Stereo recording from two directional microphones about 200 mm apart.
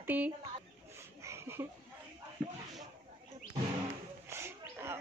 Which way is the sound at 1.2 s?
15° right (ahead or behind).